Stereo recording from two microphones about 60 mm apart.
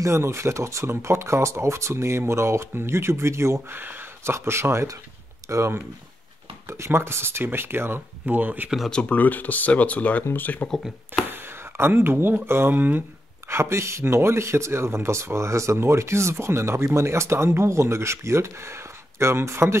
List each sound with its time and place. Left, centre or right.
0.0 s speech: right
6.7 s speech: right
8.6 s speech: centre
8.9 s speech: left
11.2 s speech: right
13.5 s speech: right